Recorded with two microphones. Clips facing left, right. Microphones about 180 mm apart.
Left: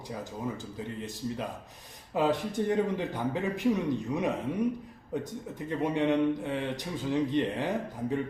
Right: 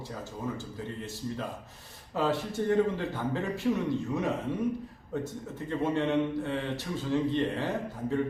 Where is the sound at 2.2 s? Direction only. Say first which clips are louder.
Left 2 dB; 15° left (ahead or behind).